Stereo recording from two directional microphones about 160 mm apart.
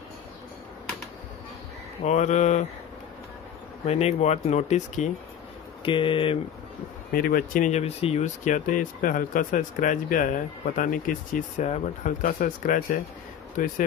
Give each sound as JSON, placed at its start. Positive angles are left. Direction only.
{"t": 2.0, "sound": "speech", "side_deg": 45}
{"t": 3.8, "sound": "speech", "side_deg": 40}
{"t": 5.9, "sound": "speech", "side_deg": 30}
{"t": 7.1, "sound": "speech", "side_deg": 65}